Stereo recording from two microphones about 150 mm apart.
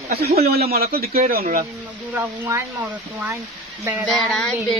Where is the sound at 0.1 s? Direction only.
90° right.